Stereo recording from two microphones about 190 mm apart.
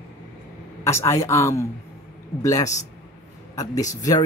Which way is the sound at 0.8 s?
15° left (ahead or behind).